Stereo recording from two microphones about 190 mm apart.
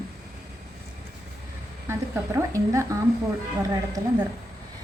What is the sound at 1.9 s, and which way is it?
A woman's voice, 15° right (ahead or behind).